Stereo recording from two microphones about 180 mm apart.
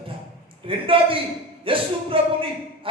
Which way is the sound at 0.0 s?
30° right (ahead or behind).